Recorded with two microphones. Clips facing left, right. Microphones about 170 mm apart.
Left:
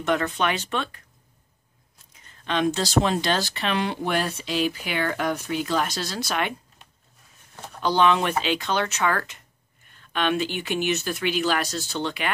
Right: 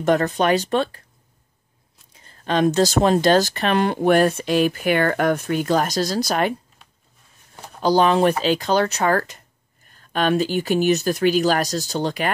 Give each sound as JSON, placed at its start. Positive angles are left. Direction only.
{"t": 0.0, "sound": "speech", "side_deg": -40}
{"t": 2.1, "sound": "speech", "side_deg": -35}
{"t": 7.8, "sound": "speech", "side_deg": -40}